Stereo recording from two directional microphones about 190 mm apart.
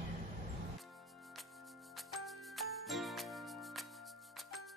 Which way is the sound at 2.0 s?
Centre (ahead or behind).